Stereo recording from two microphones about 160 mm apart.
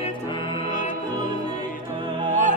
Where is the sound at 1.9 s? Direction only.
30° right (ahead or behind).